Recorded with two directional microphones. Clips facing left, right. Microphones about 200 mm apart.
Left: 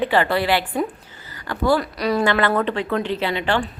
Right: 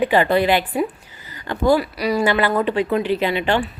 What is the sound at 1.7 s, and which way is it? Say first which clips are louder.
A woman's voice: right 1 dB; 10° right (ahead or behind).